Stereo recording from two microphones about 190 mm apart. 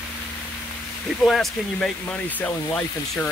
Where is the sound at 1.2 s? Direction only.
Centre (ahead or behind).